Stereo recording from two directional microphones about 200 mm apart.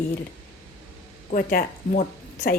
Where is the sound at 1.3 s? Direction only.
45° left (ahead or behind).